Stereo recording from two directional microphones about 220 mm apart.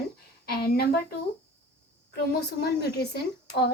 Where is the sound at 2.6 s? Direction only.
45° left (ahead or behind).